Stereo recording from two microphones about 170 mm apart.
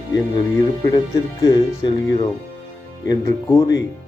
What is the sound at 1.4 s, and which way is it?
Speech, 25° left (ahead or behind).